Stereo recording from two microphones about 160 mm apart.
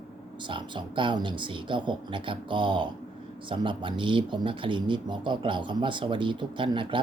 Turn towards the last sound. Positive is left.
turn(degrees=-30)  # may be behind; listen again after turning